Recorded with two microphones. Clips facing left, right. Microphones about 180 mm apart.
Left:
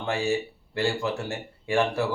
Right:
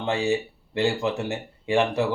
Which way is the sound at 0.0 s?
20° right (ahead or behind).